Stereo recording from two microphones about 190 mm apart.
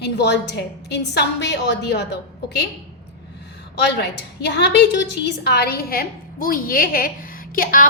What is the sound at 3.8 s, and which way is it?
A woman's voice, 60° left (ahead or behind).